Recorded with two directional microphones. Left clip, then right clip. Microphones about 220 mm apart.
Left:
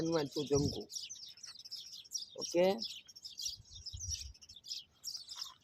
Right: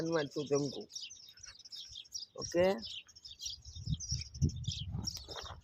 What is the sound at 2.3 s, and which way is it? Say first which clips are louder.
Speech: right 1 dB; 10° right (ahead or behind).